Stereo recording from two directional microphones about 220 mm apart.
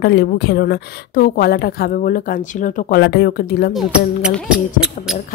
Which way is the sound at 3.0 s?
50° left (ahead or behind).